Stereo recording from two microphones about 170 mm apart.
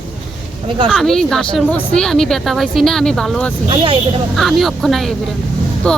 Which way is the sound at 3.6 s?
30° right (ahead or behind).